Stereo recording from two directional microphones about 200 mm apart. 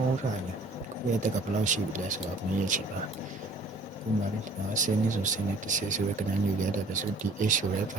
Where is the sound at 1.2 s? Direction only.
40° right (ahead or behind).